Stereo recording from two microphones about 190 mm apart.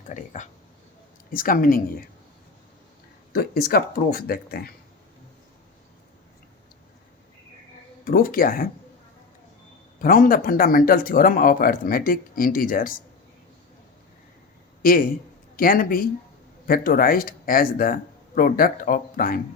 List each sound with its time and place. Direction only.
0.0 s speech: 40° left (ahead or behind)
3.3 s speech: 50° left (ahead or behind)
8.0 s speech: 50° left (ahead or behind)
10.0 s speech: 50° left (ahead or behind)
14.8 s a man's voice: 45° left (ahead or behind)